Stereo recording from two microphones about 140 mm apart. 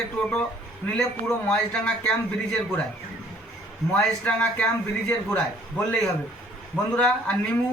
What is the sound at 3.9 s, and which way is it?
A man's voice, 10° left (ahead or behind).